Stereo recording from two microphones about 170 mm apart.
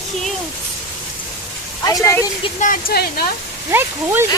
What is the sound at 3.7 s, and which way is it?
Speech, 15° right (ahead or behind).